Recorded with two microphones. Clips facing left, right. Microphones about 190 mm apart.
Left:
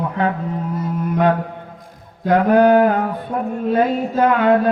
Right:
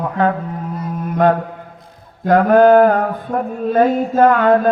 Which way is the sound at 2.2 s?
45° right (ahead or behind).